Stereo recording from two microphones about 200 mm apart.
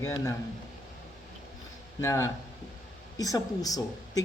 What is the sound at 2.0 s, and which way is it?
Speech, 15° left (ahead or behind).